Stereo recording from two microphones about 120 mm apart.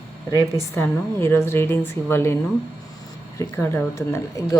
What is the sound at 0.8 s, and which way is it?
Speech, 20° left (ahead or behind).